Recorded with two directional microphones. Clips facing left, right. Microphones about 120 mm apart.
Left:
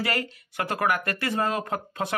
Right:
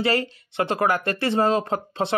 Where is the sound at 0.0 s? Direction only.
30° right (ahead or behind).